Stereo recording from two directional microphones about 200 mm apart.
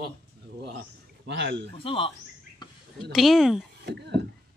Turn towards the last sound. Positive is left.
turn(degrees=-60)  # may be behind; listen again after turning